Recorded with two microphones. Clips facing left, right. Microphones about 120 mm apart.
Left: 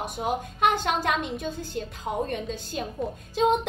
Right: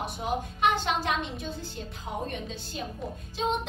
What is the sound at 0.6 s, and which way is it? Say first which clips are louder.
Speech: left 3 dB; 50° left (ahead or behind).